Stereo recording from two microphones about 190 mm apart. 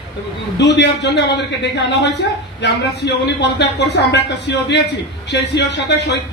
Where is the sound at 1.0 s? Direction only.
65° left (ahead or behind).